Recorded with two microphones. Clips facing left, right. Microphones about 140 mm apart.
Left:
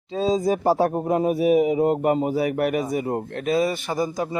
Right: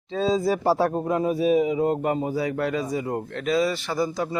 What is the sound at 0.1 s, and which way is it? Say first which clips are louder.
Speech: left 1 dB; 40° left (ahead or behind).